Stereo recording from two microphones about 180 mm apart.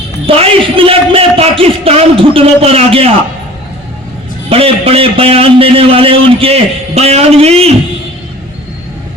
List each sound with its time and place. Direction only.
0.3 s a man's voice: 30° right (ahead or behind)
4.4 s a man's voice: 35° right (ahead or behind)